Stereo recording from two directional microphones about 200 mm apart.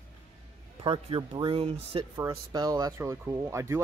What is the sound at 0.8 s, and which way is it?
Speech, 25° right (ahead or behind).